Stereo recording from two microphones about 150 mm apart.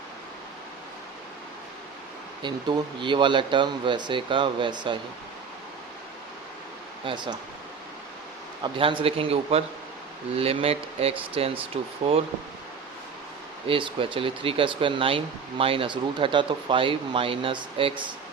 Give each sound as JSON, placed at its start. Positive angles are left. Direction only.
{"t": 2.4, "sound": "speech", "side_deg": -30}
{"t": 7.0, "sound": "speech", "side_deg": -35}
{"t": 8.6, "sound": "speech", "side_deg": -35}
{"t": 13.7, "sound": "speech", "side_deg": -35}